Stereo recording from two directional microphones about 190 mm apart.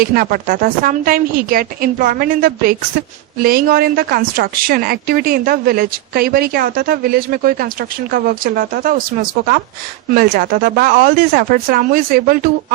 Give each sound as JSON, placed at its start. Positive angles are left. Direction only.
{"t": 0.0, "sound": "speech", "side_deg": -50}
{"t": 10.2, "sound": "speech", "side_deg": -50}